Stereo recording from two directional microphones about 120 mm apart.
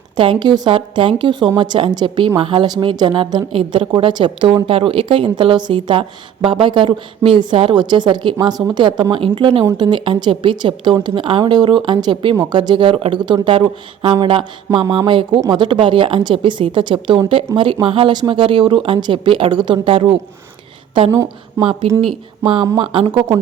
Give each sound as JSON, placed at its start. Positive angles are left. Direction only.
{"t": 0.2, "sound": "a woman's voice", "side_deg": -40}
{"t": 21.6, "sound": "a woman's voice", "side_deg": -45}